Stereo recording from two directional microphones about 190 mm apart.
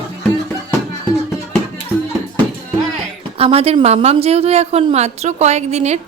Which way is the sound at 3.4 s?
30° right (ahead or behind).